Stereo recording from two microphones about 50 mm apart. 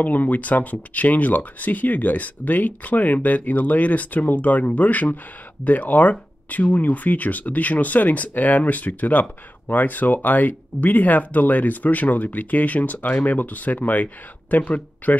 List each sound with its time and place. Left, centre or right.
0.0 s speech: left